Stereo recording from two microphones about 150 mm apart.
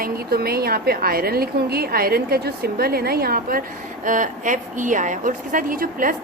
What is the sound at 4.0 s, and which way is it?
A woman's voice, 60° right (ahead or behind).